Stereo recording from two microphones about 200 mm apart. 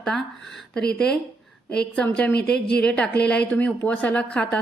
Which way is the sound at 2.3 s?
55° left (ahead or behind).